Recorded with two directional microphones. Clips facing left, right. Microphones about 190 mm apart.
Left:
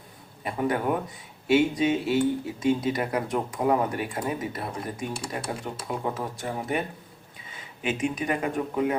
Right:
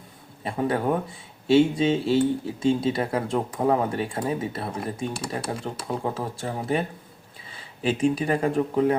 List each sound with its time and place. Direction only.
0.4 s speech: 30° right (ahead or behind)